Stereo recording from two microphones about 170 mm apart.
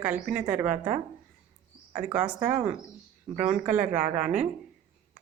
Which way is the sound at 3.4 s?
50° right (ahead or behind).